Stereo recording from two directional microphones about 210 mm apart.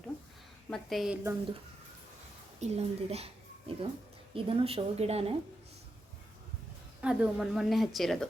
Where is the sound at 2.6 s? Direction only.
30° right (ahead or behind).